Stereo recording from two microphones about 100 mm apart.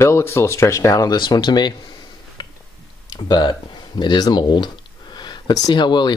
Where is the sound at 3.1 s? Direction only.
45° left (ahead or behind).